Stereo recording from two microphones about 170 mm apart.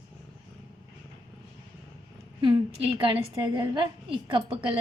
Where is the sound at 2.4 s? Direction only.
30° right (ahead or behind).